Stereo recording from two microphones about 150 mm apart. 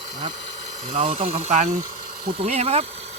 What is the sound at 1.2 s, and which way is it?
Speech, 45° right (ahead or behind).